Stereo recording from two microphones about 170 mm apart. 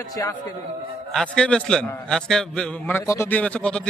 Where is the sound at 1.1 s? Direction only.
5° left (ahead or behind).